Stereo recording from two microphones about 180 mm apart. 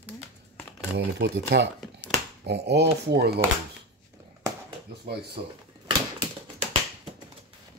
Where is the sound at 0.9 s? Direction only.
75° right (ahead or behind).